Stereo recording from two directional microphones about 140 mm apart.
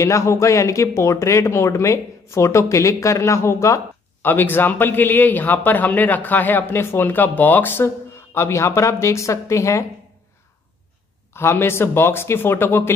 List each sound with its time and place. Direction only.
0.0 s a woman's voice: 20° left (ahead or behind)
11.3 s speech: 15° left (ahead or behind)